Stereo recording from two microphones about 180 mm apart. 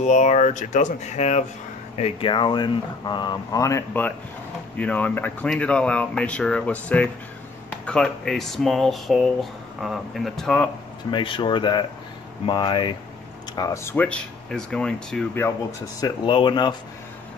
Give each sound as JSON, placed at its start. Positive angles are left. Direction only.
{"t": 0.0, "sound": "speech", "side_deg": 40}
{"t": 11.1, "sound": "speech", "side_deg": 25}
{"t": 16.0, "sound": "speech", "side_deg": 25}